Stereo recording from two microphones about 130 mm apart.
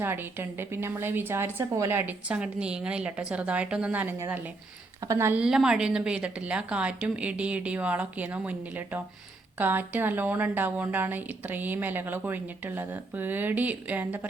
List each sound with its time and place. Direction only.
0.0 s a woman's voice: 15° right (ahead or behind)
5.4 s a woman's voice: 5° right (ahead or behind)